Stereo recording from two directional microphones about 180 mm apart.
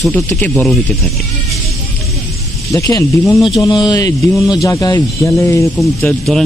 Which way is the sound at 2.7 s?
15° left (ahead or behind).